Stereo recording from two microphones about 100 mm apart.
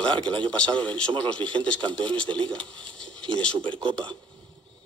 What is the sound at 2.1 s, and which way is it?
Speech, 10° left (ahead or behind).